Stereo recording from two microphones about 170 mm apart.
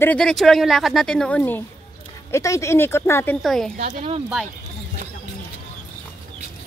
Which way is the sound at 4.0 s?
35° right (ahead or behind).